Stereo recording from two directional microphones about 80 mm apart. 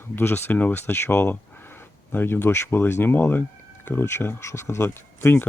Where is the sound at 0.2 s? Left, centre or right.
Left.